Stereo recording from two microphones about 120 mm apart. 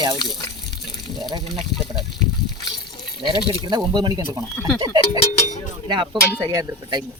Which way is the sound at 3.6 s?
35° right (ahead or behind).